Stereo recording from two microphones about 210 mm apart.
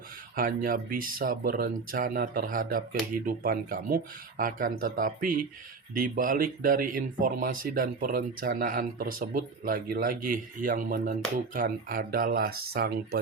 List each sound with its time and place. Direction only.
0.3 s speech: 40° right (ahead or behind)